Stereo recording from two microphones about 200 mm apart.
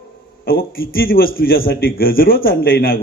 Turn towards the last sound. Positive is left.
turn(degrees=45)  # may be behind; listen again after turning